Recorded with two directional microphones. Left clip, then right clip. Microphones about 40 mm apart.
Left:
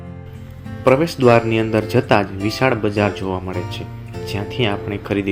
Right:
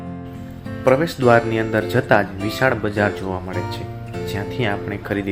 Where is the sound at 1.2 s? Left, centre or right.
Left.